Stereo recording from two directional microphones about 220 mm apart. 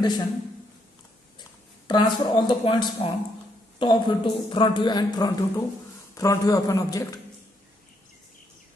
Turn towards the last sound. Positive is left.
turn(degrees=15)  # may be behind; listen again after turning